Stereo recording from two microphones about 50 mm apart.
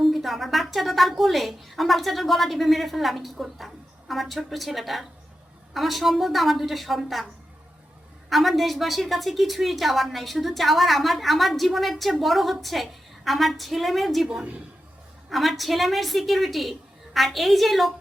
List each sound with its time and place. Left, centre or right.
0.0 s a woman's voice: centre
8.3 s a woman's voice: centre
15.3 s a woman's voice: centre